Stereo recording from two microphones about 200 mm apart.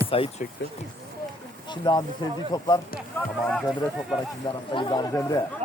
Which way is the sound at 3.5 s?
Centre (ahead or behind).